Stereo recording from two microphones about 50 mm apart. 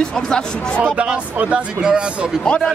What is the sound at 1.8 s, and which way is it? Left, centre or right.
Speech, centre.